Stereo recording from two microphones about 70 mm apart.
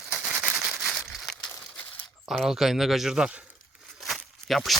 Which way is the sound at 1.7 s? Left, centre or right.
Left.